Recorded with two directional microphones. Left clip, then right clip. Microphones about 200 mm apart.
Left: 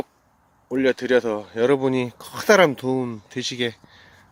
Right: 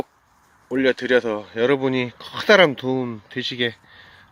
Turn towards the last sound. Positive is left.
turn(degrees=0)  # may be behind; listen again after turning